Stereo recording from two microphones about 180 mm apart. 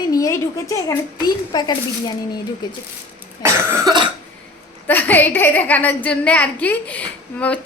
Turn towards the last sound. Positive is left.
turn(degrees=10)  # may be behind; listen again after turning